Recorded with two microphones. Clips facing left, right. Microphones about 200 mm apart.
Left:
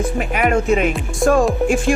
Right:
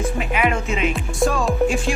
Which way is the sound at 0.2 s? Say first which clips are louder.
Left 5 dB; 45° left (ahead or behind).